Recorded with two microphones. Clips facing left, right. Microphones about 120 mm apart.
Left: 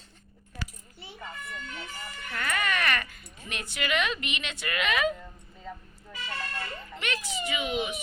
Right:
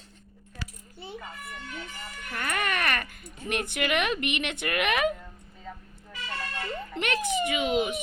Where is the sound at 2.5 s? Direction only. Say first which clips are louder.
Even; 50° right (ahead or behind).